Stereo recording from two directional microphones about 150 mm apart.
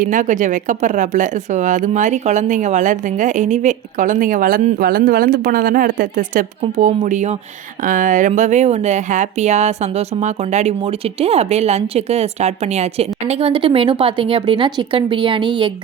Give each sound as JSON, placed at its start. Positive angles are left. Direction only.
{"t": 0.0, "sound": "speech", "side_deg": -60}
{"t": 4.8, "sound": "a woman's voice", "side_deg": -80}
{"t": 6.6, "sound": "speech", "side_deg": -50}